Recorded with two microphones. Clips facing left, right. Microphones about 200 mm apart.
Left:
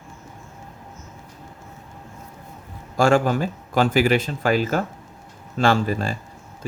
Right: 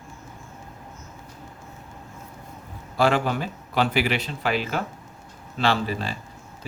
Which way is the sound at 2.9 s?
45° left (ahead or behind).